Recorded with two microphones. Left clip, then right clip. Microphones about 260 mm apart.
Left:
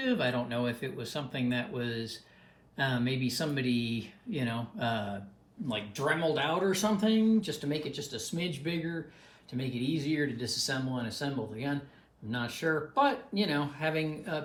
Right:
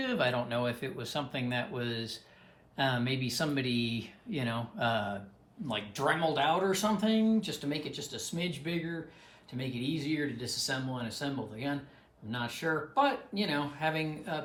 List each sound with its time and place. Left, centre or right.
0.0 s speech: right